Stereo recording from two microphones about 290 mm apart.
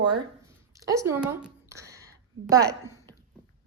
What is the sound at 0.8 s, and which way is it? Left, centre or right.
Speech, centre.